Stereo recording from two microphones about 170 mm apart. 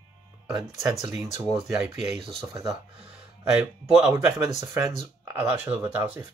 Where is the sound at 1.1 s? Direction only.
15° right (ahead or behind).